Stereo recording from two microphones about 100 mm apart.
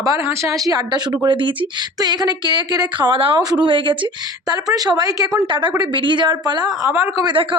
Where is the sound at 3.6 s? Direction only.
55° right (ahead or behind); by 5.3 s 40° right (ahead or behind).